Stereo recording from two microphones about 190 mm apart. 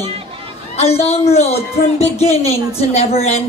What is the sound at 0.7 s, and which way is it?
Speech, 35° left (ahead or behind).